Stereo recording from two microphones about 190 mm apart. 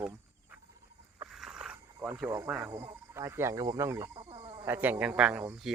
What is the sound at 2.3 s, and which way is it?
Speech, 10° right (ahead or behind).